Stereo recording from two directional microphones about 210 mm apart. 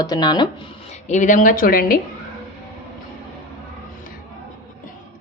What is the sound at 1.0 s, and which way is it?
Speech, 35° left (ahead or behind).